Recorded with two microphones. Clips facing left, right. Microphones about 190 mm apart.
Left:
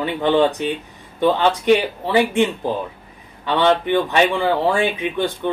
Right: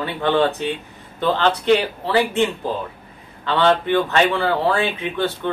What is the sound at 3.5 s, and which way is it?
Speech, 15° left (ahead or behind).